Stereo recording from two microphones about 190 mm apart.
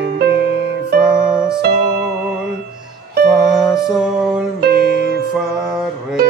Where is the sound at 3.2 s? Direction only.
Centre (ahead or behind).